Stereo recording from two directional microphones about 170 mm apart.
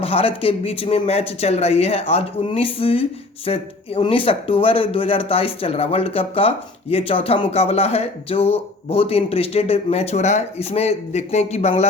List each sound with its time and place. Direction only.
0.0 s speech: 35° left (ahead or behind)